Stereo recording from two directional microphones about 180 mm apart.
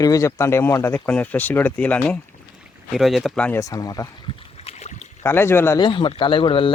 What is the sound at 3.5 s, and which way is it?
Speech, 20° left (ahead or behind).